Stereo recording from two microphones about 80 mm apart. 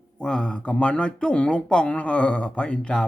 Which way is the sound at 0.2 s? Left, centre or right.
Centre.